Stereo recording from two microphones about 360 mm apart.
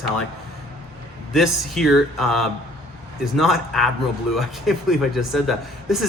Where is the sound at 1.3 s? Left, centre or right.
Centre.